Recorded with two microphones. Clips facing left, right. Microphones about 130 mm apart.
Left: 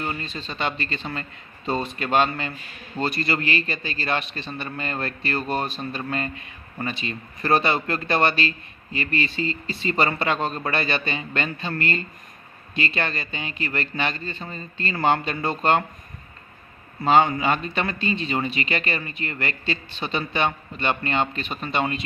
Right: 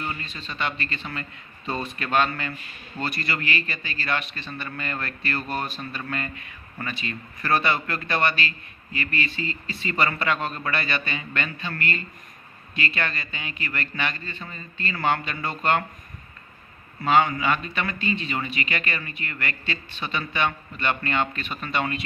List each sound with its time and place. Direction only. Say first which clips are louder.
0.0 s speech: left 3 dB; 35° left (ahead or behind)
17.0 s speech: left 2 dB; 30° left (ahead or behind)